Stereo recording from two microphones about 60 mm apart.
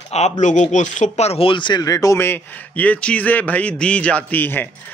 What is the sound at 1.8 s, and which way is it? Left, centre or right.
Speech, left.